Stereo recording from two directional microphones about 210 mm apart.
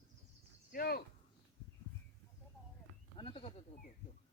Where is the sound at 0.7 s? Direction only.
45° left (ahead or behind).